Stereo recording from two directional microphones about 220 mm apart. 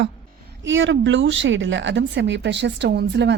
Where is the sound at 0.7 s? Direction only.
60° right (ahead or behind).